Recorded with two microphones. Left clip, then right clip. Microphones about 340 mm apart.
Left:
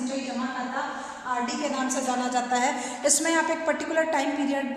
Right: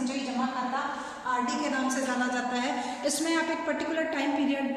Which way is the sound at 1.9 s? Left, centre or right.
Centre.